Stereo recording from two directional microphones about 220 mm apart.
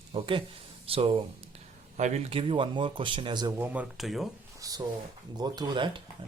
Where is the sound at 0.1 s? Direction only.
25° right (ahead or behind).